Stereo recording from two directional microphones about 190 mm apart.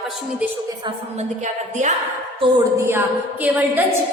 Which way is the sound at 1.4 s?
40° right (ahead or behind).